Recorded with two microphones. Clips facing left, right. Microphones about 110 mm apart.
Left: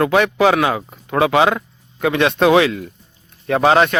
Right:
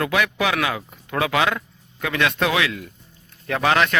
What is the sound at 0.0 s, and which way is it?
Speech, 30° left (ahead or behind).